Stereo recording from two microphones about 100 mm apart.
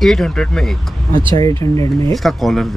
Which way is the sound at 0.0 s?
5° left (ahead or behind).